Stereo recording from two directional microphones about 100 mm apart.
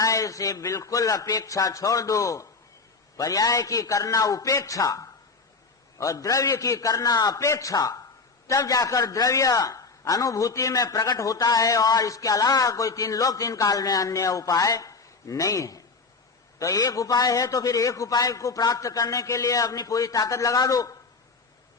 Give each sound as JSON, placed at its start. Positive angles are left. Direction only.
{"t": 0.0, "sound": "a man's voice", "side_deg": 35}